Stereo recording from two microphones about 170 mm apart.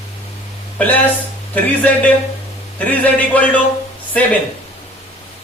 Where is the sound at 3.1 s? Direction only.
10° left (ahead or behind).